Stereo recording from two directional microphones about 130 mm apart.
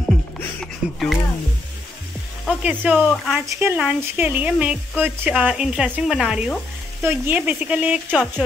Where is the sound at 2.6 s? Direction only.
10° right (ahead or behind).